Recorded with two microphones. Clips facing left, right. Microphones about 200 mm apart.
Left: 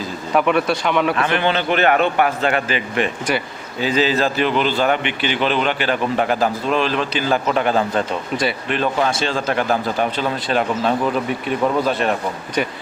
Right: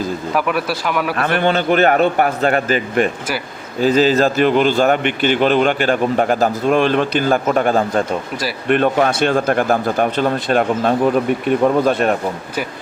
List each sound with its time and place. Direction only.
0.3 s speech: 5° right (ahead or behind)
1.1 s speech: 50° right (ahead or behind)